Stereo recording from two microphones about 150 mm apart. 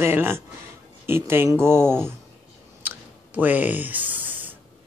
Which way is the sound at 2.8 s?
10° right (ahead or behind).